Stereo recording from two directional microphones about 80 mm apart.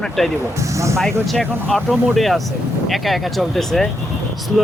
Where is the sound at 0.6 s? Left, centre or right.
Right.